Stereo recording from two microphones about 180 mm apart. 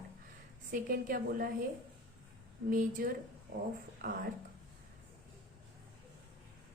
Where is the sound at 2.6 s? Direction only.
50° right (ahead or behind).